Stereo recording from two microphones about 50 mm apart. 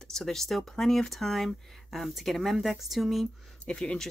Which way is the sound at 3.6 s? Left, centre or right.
Centre.